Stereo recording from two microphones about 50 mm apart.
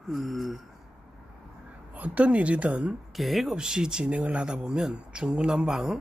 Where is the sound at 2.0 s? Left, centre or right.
Right.